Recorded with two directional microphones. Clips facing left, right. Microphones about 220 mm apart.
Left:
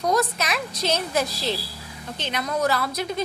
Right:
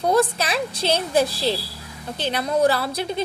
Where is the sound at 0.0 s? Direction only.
30° right (ahead or behind).